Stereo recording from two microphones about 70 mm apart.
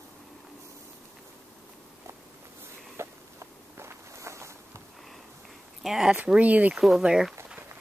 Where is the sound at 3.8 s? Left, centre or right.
Right.